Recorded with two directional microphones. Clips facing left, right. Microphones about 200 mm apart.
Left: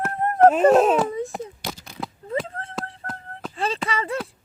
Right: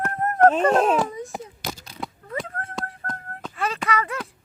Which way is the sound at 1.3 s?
Centre (ahead or behind).